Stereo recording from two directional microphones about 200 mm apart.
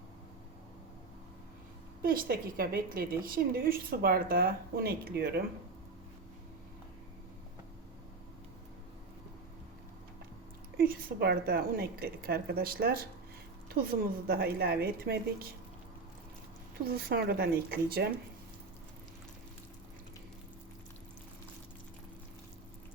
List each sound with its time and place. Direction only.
2.0 s a woman's voice: 45° right (ahead or behind)
10.8 s a woman's voice: 50° right (ahead or behind)
16.8 s a woman's voice: 50° right (ahead or behind)